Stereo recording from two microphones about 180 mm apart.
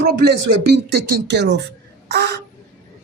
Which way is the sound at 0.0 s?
65° right (ahead or behind).